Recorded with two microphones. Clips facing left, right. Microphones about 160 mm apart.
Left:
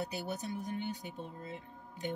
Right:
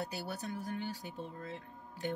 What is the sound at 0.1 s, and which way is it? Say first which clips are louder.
Speech: left 2 dB; 20° left (ahead or behind).